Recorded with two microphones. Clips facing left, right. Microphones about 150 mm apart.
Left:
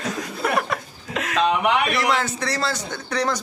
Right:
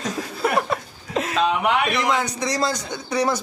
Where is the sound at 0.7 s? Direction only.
30° right (ahead or behind).